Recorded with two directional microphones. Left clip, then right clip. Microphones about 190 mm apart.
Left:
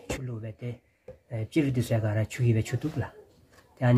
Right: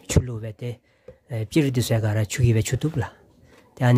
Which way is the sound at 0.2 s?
50° right (ahead or behind).